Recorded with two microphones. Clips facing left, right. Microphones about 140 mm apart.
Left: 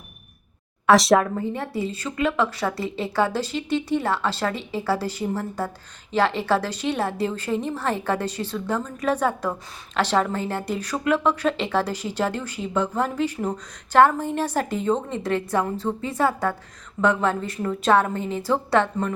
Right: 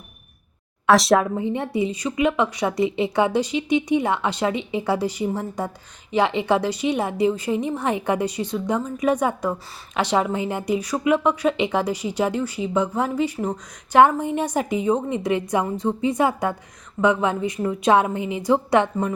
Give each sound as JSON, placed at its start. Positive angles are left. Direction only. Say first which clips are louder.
{"t": 0.9, "sound": "speech", "louder": "even", "side_deg": 0}
{"t": 1.5, "sound": "a woman's voice", "louder": "right 4 dB", "side_deg": -20}